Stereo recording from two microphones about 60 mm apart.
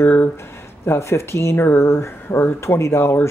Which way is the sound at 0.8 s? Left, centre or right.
Left.